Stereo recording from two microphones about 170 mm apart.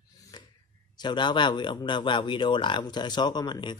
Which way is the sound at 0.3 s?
25° left (ahead or behind).